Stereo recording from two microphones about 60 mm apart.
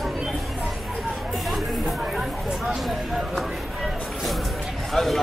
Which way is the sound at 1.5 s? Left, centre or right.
Centre.